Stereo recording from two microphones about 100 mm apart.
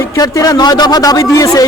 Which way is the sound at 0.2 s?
40° left (ahead or behind).